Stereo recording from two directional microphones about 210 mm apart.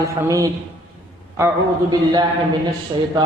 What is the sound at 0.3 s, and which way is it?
A man's voice, 15° right (ahead or behind).